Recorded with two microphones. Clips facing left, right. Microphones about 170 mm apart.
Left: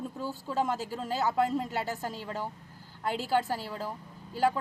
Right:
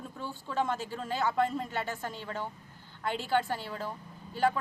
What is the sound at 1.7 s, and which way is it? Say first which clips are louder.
A woman's voice: left 2 dB; 35° left (ahead or behind).